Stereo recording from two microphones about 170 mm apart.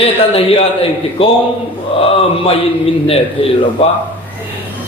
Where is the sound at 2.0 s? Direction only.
35° left (ahead or behind).